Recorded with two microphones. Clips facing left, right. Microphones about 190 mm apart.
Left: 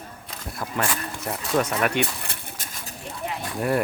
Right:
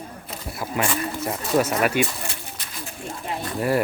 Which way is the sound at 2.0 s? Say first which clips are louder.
Right 2 dB; 60° left (ahead or behind).